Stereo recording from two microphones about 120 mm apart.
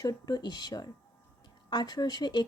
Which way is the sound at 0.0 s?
30° left (ahead or behind).